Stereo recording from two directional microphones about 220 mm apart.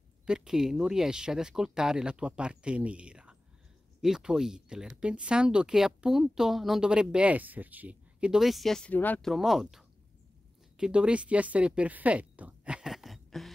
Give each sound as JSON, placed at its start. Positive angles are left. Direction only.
{"t": 0.3, "sound": "speech", "side_deg": 0}